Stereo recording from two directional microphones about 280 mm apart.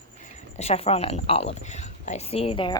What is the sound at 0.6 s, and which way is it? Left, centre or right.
A woman's voice, left.